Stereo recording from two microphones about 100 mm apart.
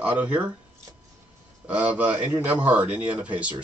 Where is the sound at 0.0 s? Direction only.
15° right (ahead or behind).